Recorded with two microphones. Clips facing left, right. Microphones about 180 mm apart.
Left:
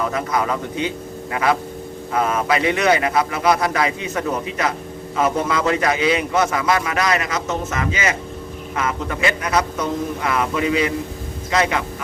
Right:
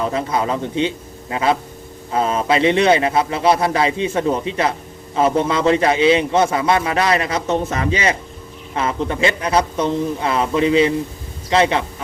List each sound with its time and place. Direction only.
0.0 s a man's voice: 25° right (ahead or behind)